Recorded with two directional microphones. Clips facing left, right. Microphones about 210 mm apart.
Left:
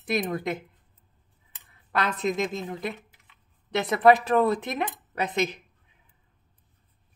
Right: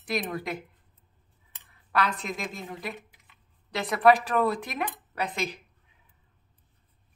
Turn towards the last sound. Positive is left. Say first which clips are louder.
# left 4 dB
turn(degrees=20)  # may be behind; listen again after turning